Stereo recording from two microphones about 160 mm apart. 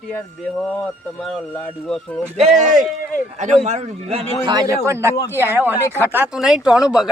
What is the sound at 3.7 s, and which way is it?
Speech, 45° right (ahead or behind).